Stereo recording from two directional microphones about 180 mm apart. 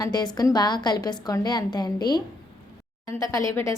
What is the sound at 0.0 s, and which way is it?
A woman's voice, 20° left (ahead or behind).